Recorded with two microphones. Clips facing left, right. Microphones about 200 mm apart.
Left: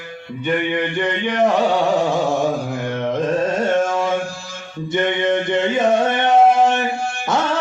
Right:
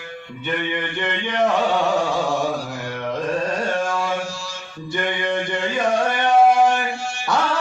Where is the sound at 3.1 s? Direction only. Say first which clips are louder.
Left 3 dB; 20° left (ahead or behind).